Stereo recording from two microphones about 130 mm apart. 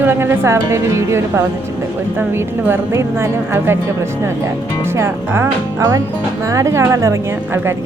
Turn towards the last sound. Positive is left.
turn(degrees=-20)  # may be behind; listen again after turning